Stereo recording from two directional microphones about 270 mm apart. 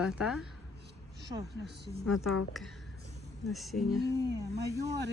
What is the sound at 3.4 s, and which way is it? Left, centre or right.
Speech, centre.